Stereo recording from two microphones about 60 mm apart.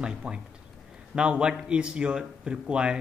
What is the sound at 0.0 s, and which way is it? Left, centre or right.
Speech, centre.